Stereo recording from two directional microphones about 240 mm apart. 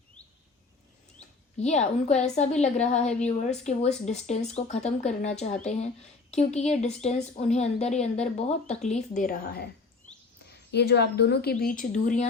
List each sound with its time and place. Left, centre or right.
1.5 s speech: left
9.1 s speech: left
10.7 s speech: left